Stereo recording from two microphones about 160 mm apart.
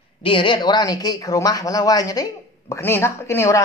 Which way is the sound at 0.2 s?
30° left (ahead or behind).